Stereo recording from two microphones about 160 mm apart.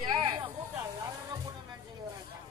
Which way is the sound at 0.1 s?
30° right (ahead or behind).